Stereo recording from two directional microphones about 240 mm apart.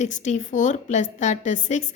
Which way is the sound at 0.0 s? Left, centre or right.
Left.